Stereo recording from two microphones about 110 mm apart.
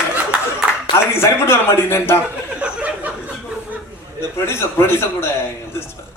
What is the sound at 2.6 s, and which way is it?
Chuckle, 10° right (ahead or behind).